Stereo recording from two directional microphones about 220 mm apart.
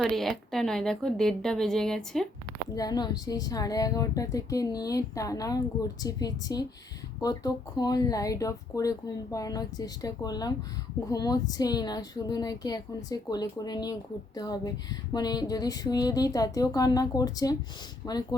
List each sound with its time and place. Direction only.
0.0 s a woman's voice: centre (ahead or behind)
2.7 s speech: 15° left (ahead or behind)